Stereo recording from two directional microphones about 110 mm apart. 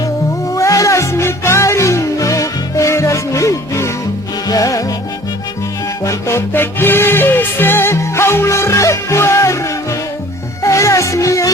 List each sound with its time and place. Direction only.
0.5 s music: 30° left (ahead or behind)
6.1 s music: 25° left (ahead or behind)
10.6 s music: 30° left (ahead or behind)